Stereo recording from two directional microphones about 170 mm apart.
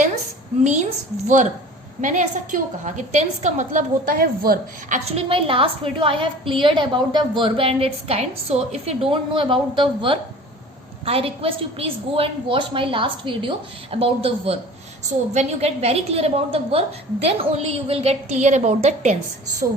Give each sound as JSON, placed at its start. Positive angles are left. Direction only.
{"t": 0.6, "sound": "a woman's voice", "side_deg": -45}
{"t": 4.9, "sound": "a woman's voice", "side_deg": -40}